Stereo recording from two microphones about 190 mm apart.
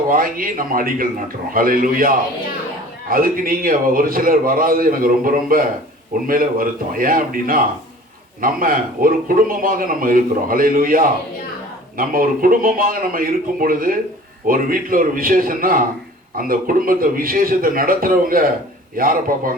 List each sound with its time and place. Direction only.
0.1 s a man's voice: 45° right (ahead or behind)